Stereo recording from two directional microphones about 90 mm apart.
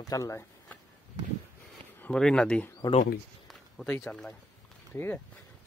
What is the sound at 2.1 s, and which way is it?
Speech, 10° left (ahead or behind).